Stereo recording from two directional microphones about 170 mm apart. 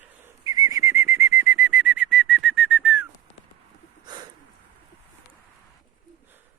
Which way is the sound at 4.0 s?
25° right (ahead or behind).